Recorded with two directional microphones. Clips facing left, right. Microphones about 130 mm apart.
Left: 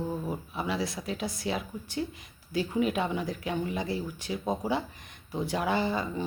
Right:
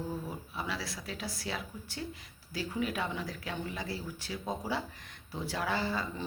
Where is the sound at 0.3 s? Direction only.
20° left (ahead or behind).